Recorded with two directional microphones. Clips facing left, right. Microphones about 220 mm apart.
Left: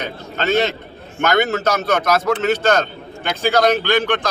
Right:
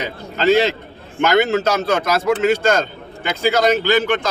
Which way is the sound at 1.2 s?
10° right (ahead or behind).